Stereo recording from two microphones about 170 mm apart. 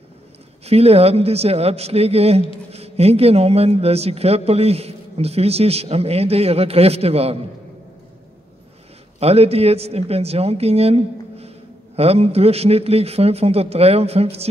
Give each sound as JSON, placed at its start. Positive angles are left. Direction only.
{"t": 0.7, "sound": "a man's voice", "side_deg": -35}
{"t": 9.2, "sound": "a man's voice", "side_deg": -35}